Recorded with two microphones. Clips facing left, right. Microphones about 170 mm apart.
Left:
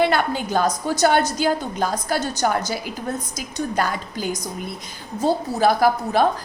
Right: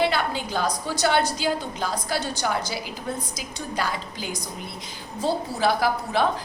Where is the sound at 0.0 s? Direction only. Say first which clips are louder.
Left 4 dB; 50° left (ahead or behind).